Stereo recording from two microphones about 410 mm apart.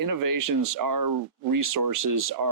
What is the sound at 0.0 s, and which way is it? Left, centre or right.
Speech, right.